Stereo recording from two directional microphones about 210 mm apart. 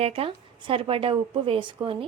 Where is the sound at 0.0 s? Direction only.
25° right (ahead or behind).